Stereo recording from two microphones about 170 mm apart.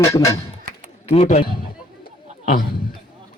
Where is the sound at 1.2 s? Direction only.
40° left (ahead or behind).